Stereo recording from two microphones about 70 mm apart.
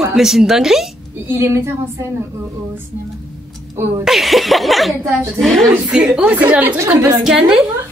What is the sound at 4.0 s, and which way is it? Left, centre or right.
A woman's voice, centre.